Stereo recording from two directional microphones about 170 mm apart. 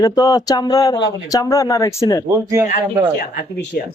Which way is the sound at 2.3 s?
15° right (ahead or behind).